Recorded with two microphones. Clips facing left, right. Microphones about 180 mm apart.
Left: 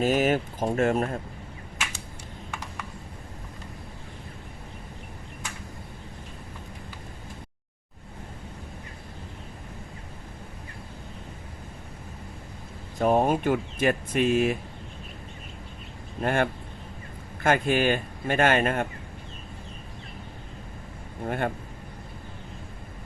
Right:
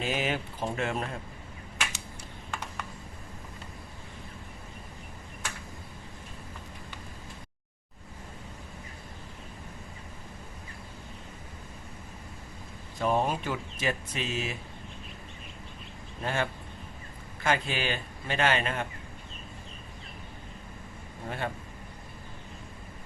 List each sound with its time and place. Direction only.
0.0 s speech: 45° left (ahead or behind)
13.0 s speech: 50° left (ahead or behind)
16.2 s speech: 55° left (ahead or behind)
21.2 s speech: 55° left (ahead or behind)